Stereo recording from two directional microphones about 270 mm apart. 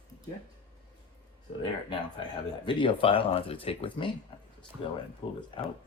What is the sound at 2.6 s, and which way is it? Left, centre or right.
Speech, centre.